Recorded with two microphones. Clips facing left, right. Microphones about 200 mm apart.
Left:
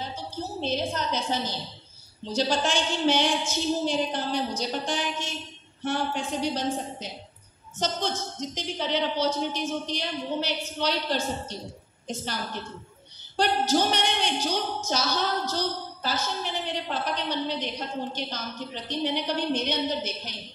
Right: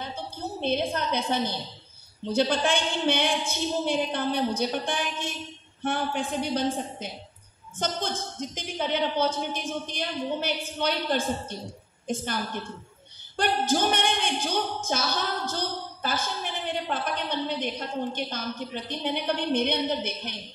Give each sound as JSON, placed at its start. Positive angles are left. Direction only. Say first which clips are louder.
{"t": 0.0, "sound": "a woman's voice", "louder": "even", "side_deg": -55}
{"t": 13.4, "sound": "a woman's voice", "louder": "left 1 dB", "side_deg": -55}
{"t": 18.9, "sound": "a woman's voice", "louder": "left 1 dB", "side_deg": -55}